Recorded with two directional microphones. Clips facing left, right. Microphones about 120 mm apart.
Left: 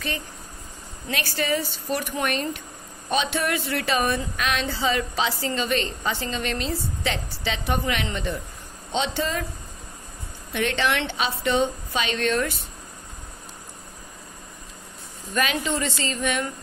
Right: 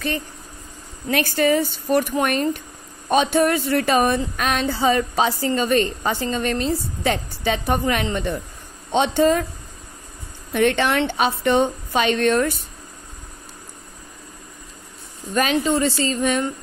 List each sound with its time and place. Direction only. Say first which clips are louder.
1.1 s a woman's voice: right 7 dB; 50° right (ahead or behind)
10.5 s a woman's voice: right 6 dB; 50° right (ahead or behind)
15.3 s a woman's voice: right 6 dB; 35° right (ahead or behind)